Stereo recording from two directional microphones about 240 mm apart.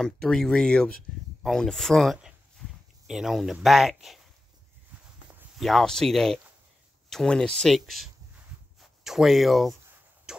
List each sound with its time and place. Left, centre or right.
0.0 s speech: centre
5.6 s speech: centre